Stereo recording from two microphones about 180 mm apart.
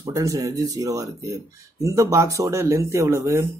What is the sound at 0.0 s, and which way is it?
Speech, 20° right (ahead or behind).